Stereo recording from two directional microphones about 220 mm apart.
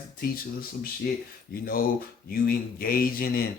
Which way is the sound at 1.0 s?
45° left (ahead or behind).